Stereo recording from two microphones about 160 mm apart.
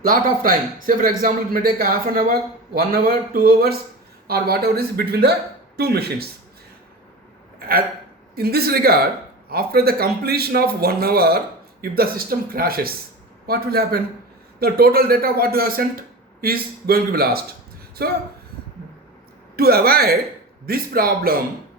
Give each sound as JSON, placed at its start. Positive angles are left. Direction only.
{"t": 0.0, "sound": "a man's voice", "side_deg": -60}
{"t": 8.4, "sound": "a man's voice", "side_deg": -75}
{"t": 19.5, "sound": "a man's voice", "side_deg": -75}